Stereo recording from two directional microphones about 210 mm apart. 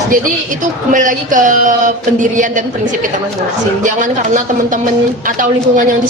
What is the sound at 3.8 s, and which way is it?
Speech, 35° right (ahead or behind).